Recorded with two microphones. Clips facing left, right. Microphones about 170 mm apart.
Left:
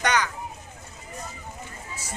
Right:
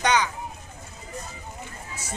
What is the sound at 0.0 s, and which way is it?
Children playing, 25° right (ahead or behind).